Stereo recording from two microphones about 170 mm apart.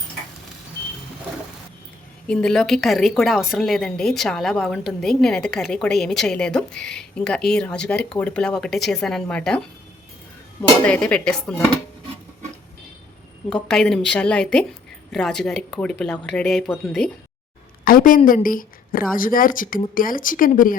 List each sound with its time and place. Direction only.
2.2 s a woman's voice: 5° left (ahead or behind)
10.6 s a woman's voice: 5° left (ahead or behind)
13.5 s a woman's voice: 5° left (ahead or behind)
17.8 s a woman's voice: 55° left (ahead or behind)